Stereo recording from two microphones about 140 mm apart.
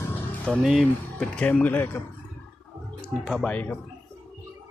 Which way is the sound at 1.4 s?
10° left (ahead or behind).